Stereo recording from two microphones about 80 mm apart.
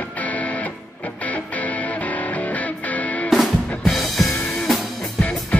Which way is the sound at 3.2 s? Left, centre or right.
Centre.